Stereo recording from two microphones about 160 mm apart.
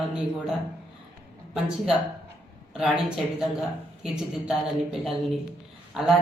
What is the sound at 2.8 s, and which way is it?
Speech, 5° right (ahead or behind).